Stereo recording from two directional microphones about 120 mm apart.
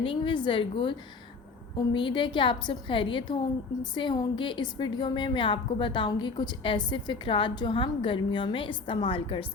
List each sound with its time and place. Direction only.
0.0 s a woman's voice: 45° left (ahead or behind)